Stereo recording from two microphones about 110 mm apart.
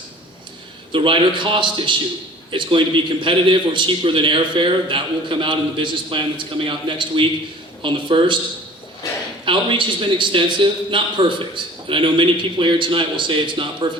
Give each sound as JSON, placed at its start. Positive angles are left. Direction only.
{"t": 0.9, "sound": "a man's voice", "side_deg": -50}
{"t": 9.5, "sound": "a man's voice", "side_deg": -50}